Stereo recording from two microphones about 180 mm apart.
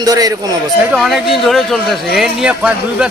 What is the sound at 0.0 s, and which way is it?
Speech, 20° right (ahead or behind).